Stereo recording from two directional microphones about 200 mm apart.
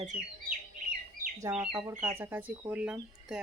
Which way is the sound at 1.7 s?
20° right (ahead or behind).